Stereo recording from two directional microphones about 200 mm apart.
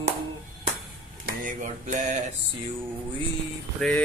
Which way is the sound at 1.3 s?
40° right (ahead or behind).